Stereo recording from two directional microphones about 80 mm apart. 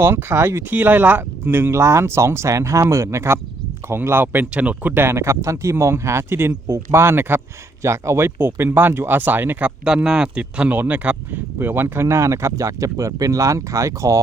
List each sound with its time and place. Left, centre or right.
0.0 s speech: right